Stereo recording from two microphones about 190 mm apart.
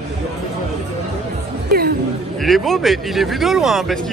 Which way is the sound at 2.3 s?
Centre (ahead or behind).